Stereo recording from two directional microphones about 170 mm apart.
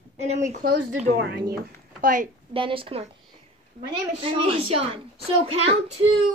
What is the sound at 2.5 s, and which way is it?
Speech, 30° right (ahead or behind).